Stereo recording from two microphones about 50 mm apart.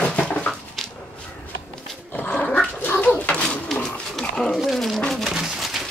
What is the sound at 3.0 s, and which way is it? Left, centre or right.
Pigeon, left.